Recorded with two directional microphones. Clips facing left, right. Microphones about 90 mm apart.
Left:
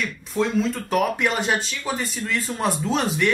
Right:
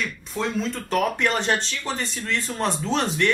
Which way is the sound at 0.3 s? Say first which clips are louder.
Left 5 dB; centre (ahead or behind).